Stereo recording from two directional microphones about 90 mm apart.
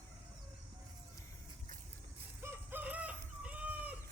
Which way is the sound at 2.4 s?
25° right (ahead or behind).